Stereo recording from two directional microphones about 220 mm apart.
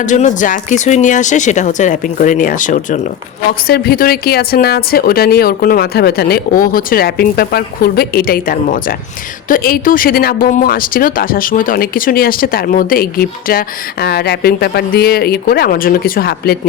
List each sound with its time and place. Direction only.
0.0 s speech: 35° left (ahead or behind)